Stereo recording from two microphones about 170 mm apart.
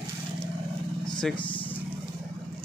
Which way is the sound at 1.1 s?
5° left (ahead or behind).